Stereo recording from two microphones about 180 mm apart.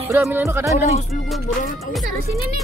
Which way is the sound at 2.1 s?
55° right (ahead or behind).